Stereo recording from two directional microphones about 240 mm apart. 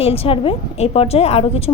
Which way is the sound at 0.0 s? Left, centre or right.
Left.